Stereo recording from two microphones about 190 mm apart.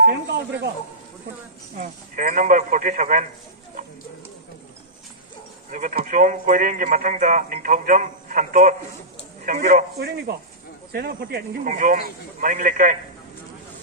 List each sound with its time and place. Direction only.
0.1 s speech: 55° right (ahead or behind)
1.8 s speech: 45° right (ahead or behind)
5.7 s speech: 45° right (ahead or behind)